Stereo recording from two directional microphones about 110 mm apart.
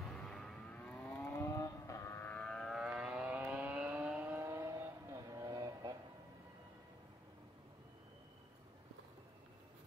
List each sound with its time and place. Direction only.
0.1 s vehicle: 5° left (ahead or behind)
1.4 s vehicle: 30° left (ahead or behind); by 4.4 s 10° right (ahead or behind)
4.4 s vehicle: 25° right (ahead or behind)